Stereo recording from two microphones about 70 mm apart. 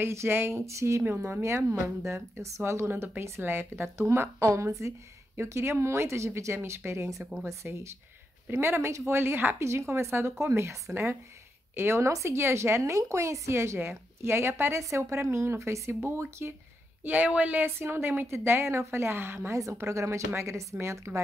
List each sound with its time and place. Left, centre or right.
0.0 s speech: right
1.0 s a woman's voice: right
17.0 s speech: right
17.6 s a woman's voice: right